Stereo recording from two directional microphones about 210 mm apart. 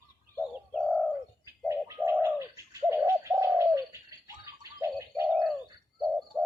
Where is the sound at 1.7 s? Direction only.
15° right (ahead or behind).